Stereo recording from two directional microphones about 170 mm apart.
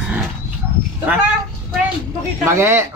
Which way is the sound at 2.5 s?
15° right (ahead or behind).